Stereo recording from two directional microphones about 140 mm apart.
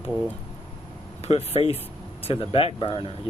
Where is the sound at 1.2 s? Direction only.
45° left (ahead or behind).